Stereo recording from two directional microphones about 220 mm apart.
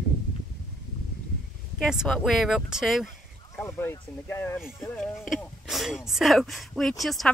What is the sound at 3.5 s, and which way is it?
Speech, 10° left (ahead or behind).